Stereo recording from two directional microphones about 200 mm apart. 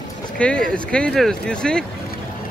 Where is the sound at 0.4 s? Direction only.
5° left (ahead or behind).